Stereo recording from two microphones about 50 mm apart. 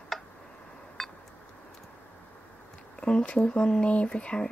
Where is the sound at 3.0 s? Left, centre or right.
Left.